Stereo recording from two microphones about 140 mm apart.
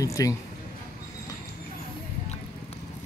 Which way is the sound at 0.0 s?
25° left (ahead or behind).